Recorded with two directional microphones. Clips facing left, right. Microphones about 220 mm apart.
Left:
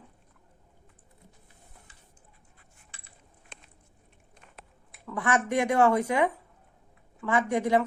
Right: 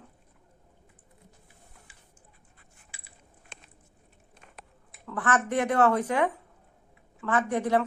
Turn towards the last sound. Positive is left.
turn(degrees=10)  # may be behind; listen again after turning